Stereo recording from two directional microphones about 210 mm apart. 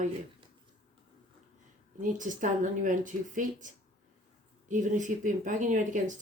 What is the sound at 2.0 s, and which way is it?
Speech, 40° right (ahead or behind).